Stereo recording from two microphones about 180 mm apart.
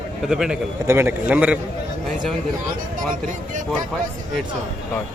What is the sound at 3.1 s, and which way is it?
Speech, 45° right (ahead or behind).